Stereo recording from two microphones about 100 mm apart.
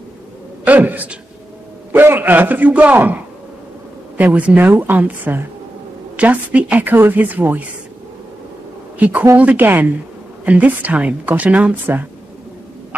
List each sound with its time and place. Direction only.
0.7 s a man's voice: 15° right (ahead or behind)
4.2 s a woman's voice: 15° right (ahead or behind)
8.9 s a woman's voice: 15° right (ahead or behind)